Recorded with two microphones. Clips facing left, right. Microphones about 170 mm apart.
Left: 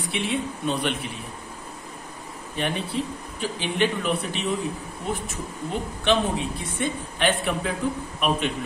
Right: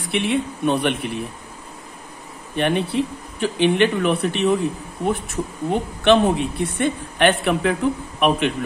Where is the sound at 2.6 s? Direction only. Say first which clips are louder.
Right 7 dB; 65° right (ahead or behind).